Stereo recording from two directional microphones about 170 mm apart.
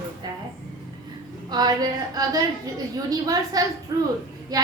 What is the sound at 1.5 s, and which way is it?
A woman's voice, 25° right (ahead or behind).